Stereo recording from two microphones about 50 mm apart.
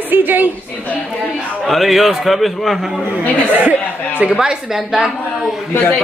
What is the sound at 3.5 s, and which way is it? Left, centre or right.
Speech, right.